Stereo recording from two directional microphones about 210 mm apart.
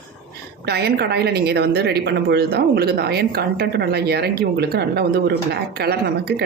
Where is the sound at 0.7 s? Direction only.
50° right (ahead or behind).